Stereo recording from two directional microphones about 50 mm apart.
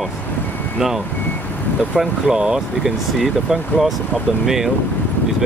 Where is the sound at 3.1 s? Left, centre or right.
Centre.